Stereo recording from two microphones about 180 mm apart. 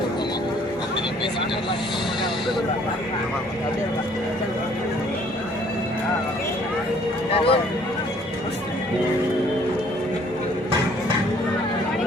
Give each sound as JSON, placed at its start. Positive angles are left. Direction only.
{"t": 7.3, "sound": "speech", "side_deg": 30}